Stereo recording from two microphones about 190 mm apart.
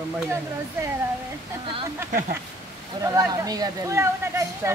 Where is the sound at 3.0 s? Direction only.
15° right (ahead or behind).